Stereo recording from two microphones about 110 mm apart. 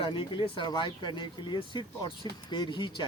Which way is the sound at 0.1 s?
50° left (ahead or behind).